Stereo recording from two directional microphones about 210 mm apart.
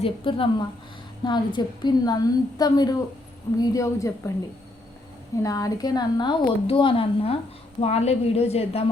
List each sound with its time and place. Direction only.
0.0 s a woman's voice: 25° left (ahead or behind)
5.4 s a woman's voice: 15° left (ahead or behind)